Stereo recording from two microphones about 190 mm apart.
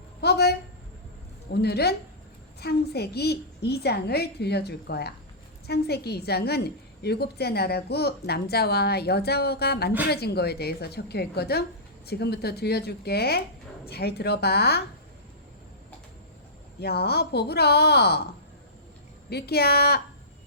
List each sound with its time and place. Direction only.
0.2 s speech: 60° left (ahead or behind)
1.6 s a woman's voice: 60° left (ahead or behind)
16.8 s a woman's voice: 55° left (ahead or behind)
19.3 s a woman's voice: 55° left (ahead or behind)